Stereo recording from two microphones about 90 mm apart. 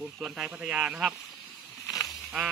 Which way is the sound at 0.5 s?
10° right (ahead or behind).